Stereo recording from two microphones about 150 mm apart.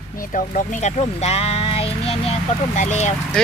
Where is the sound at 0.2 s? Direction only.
65° left (ahead or behind); by 2.3 s 40° left (ahead or behind).